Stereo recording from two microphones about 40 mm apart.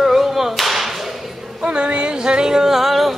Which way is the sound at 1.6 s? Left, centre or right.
Right.